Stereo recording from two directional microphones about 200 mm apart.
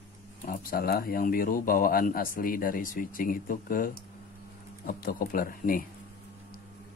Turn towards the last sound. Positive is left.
turn(degrees=45)  # may be behind; listen again after turning